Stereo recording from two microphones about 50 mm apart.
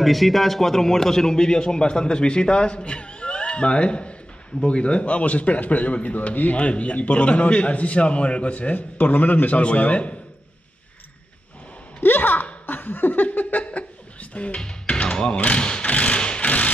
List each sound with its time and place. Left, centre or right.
0.0 s a man's voice: centre; by 10.1 s left
12.0 s a sound: left
12.6 s laughter: left
14.3 s speech: left
14.6 s tap: centre